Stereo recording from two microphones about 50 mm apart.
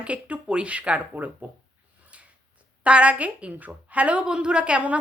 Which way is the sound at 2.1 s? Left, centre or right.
Right.